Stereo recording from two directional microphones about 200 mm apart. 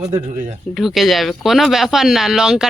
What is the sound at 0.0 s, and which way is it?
Speech, 25° right (ahead or behind).